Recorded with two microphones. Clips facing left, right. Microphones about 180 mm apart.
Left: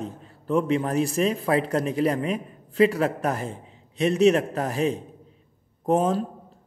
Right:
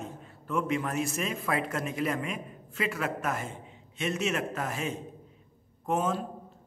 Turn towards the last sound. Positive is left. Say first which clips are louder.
# left 7 dB
turn(degrees=35)  # may be behind; listen again after turning